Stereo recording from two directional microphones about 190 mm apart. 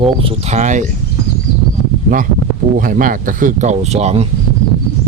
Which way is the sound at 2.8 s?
45° right (ahead or behind).